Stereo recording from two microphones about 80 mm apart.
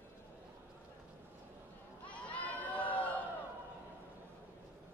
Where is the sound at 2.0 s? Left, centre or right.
Centre.